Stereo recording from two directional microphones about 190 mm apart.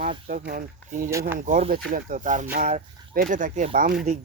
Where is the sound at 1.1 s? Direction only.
15° right (ahead or behind).